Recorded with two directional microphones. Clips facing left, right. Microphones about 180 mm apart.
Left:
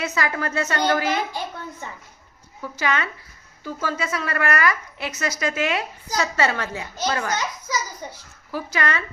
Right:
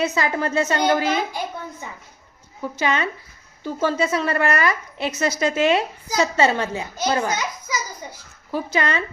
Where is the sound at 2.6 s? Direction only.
20° right (ahead or behind).